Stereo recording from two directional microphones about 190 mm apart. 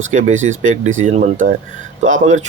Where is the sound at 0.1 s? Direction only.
40° right (ahead or behind).